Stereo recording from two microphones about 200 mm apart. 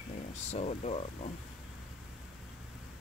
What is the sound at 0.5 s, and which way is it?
Speech, 35° left (ahead or behind).